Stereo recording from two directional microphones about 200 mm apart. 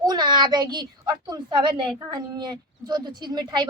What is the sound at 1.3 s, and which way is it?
A woman's voice, 25° right (ahead or behind).